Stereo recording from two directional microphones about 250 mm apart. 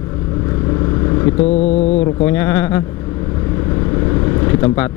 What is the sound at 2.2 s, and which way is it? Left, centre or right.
Speech, centre.